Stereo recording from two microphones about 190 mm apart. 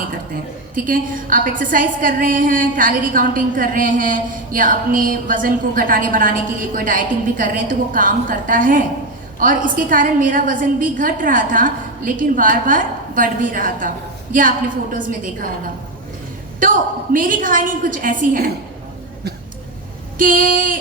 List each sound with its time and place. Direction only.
0.9 s a woman's voice: 45° right (ahead or behind)
16.6 s a woman's voice: 45° right (ahead or behind)
20.1 s a woman's voice: 45° right (ahead or behind)